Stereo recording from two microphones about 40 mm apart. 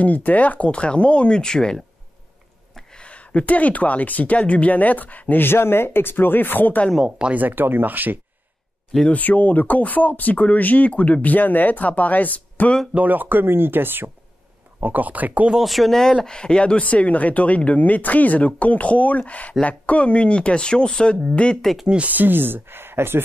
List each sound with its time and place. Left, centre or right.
0.0 s speech: left
0.7 s speech: left
2.9 s speech: left
5.4 s speech: left
7.1 s speech: right
7.3 s speech: right
9.1 s speech: left
12.9 s speech: right
14.8 s speech: right
15.6 s speech: centre
15.9 s speech: centre
21.5 s speech: centre
22.0 s speech: right